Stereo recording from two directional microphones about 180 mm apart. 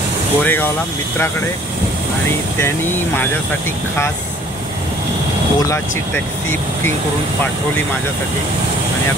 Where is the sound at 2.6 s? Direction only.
10° left (ahead or behind).